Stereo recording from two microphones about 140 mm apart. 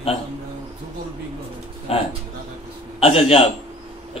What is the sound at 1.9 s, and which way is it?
A man's voice, 40° left (ahead or behind).